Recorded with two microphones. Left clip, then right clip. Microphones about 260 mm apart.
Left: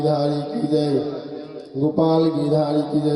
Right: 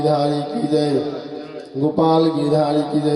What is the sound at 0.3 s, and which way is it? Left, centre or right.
Mantra, centre.